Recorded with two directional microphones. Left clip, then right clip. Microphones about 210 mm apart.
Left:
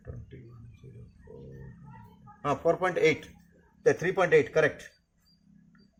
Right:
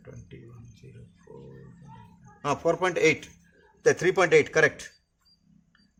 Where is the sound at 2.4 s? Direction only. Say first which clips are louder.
Right 1 dB; 20° right (ahead or behind).